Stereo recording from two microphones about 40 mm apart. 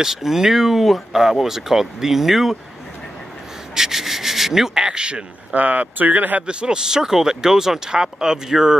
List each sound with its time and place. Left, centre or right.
0.0 s speech: centre
3.7 s rub: centre
4.7 s speech: right
5.5 s speech: right
6.4 s speech: right